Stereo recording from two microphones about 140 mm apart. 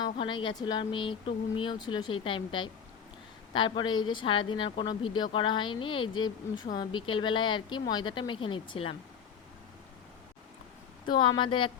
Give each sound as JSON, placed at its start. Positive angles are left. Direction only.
{"t": 0.0, "sound": "speech", "side_deg": 35}
{"t": 11.0, "sound": "speech", "side_deg": 35}